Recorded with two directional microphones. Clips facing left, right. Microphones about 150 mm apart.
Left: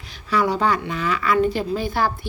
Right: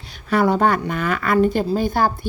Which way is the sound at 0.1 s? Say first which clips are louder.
Right 3 dB; 55° right (ahead or behind).